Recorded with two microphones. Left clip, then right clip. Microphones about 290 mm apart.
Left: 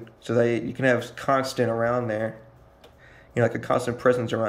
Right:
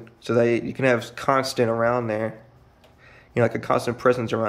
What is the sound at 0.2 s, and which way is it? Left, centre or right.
Speech, centre.